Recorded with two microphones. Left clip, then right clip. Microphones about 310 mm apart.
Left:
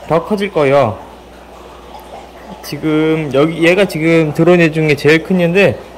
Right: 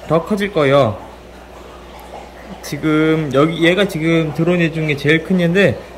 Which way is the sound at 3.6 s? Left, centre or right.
Centre.